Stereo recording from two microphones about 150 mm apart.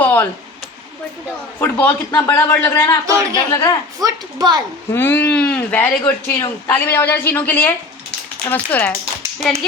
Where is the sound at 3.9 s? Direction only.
25° right (ahead or behind).